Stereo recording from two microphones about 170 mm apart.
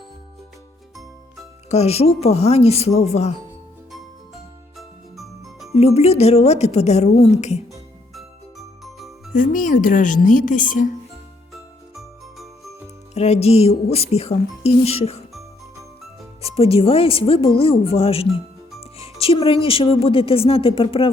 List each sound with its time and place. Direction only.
1.7 s speech: 40° left (ahead or behind)
4.8 s music: centre (ahead or behind)
5.7 s speech: 40° left (ahead or behind)
8.1 s music: centre (ahead or behind)
9.3 s speech: 50° left (ahead or behind)
11.9 s jingle bell: centre (ahead or behind)
13.1 s speech: 40° left (ahead or behind)
15.3 s music: centre (ahead or behind)
16.4 s speech: 35° left (ahead or behind)
18.8 s music: 35° left (ahead or behind)
19.6 s speech: 30° left (ahead or behind)